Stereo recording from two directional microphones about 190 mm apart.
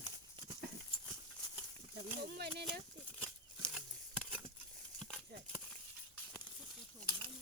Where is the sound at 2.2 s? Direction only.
60° right (ahead or behind).